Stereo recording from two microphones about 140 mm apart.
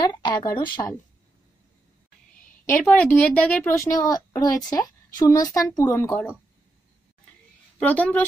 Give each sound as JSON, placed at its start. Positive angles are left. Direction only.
{"t": 0.0, "sound": "a woman's voice", "side_deg": 30}
{"t": 2.7, "sound": "speech", "side_deg": 10}
{"t": 3.7, "sound": "a woman's voice", "side_deg": 25}
{"t": 7.8, "sound": "speech", "side_deg": 10}